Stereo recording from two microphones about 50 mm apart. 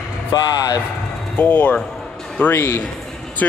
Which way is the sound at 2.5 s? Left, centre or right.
Left.